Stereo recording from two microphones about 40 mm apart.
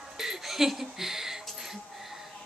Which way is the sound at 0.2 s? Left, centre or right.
Centre.